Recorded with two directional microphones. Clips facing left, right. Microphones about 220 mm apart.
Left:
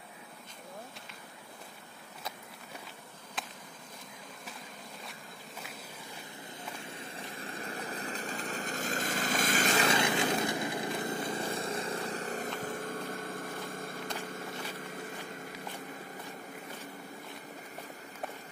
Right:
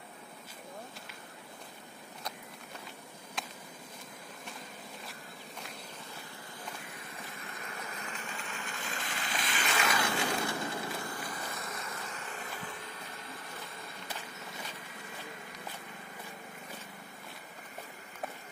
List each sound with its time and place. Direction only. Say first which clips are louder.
3.4 s a sound: even; centre (ahead or behind)
6.8 s vehicle: left 3 dB; 30° left (ahead or behind)
9.8 s vehicle: left 3 dB; 20° left (ahead or behind); by 13.9 s 50° left (ahead or behind)